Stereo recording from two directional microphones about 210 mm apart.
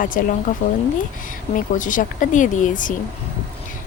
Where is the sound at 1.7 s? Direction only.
40° left (ahead or behind).